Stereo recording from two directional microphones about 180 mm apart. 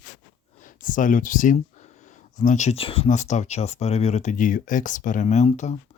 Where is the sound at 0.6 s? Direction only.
50° left (ahead or behind).